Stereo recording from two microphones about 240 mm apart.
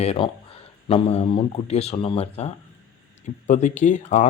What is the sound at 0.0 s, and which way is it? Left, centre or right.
A man's voice, left.